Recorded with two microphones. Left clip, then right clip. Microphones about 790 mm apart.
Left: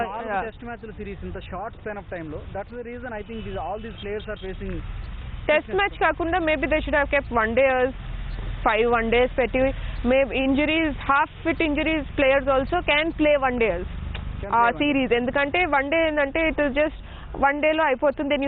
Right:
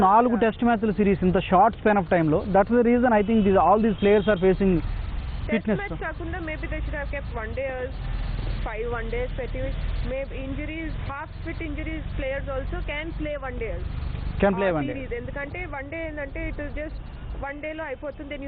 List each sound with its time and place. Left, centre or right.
0.1 s speech: right
5.8 s speech: left
15.1 s speech: left